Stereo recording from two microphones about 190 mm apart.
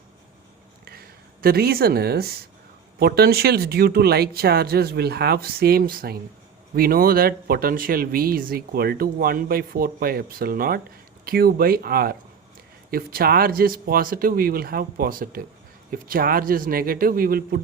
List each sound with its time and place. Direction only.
0.9 s speech: 55° right (ahead or behind)